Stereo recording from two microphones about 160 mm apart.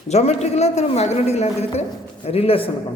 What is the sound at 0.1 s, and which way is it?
A woman's voice, 40° left (ahead or behind).